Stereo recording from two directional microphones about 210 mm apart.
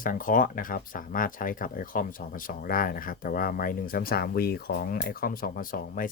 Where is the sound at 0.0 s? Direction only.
40° left (ahead or behind).